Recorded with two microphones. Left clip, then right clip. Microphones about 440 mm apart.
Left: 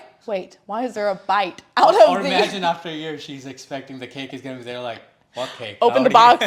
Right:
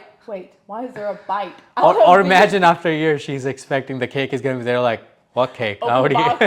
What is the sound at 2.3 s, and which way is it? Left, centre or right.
Speech, right.